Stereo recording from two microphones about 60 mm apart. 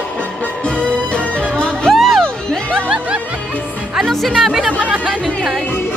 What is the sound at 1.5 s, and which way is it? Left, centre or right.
Music, centre.